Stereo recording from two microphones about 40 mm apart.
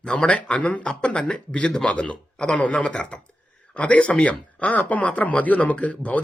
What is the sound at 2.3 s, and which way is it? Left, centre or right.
A man's voice, left.